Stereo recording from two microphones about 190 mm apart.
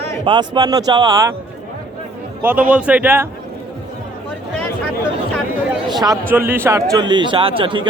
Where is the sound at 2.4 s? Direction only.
10° right (ahead or behind).